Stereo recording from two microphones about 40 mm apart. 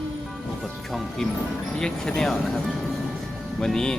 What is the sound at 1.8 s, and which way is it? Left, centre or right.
Speech, centre.